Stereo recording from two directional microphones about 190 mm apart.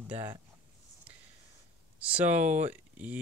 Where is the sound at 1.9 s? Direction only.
5° right (ahead or behind).